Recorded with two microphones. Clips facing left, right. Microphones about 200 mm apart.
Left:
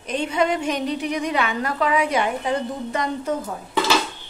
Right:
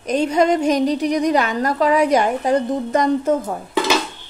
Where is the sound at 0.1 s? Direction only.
40° right (ahead or behind).